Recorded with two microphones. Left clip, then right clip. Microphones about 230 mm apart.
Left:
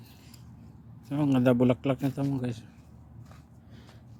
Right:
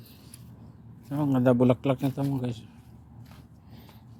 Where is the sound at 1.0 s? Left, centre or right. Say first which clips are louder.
Right 1 dB; centre.